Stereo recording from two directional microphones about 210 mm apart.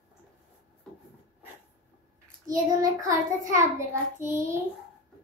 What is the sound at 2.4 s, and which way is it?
Child singing, 15° right (ahead or behind).